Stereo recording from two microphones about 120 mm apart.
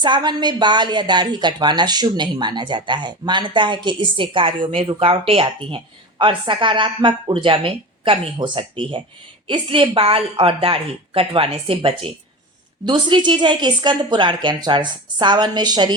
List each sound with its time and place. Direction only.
0.0 s a woman's voice: 40° right (ahead or behind)